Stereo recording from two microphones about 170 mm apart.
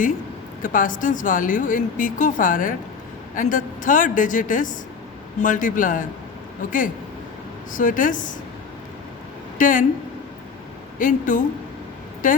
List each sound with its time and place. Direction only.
0.6 s a woman's voice: 50° left (ahead or behind)
9.6 s speech: 50° left (ahead or behind)
10.9 s a woman's voice: 50° left (ahead or behind)